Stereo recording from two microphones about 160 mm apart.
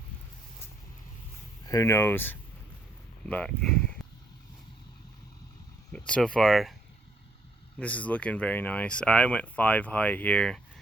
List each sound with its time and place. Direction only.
1.6 s speech: 20° left (ahead or behind)
4.0 s a sound: centre (ahead or behind)
5.9 s speech: 5° left (ahead or behind)
7.8 s speech: 10° left (ahead or behind)